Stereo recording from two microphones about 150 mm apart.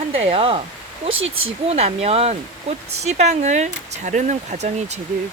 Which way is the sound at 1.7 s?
45° right (ahead or behind).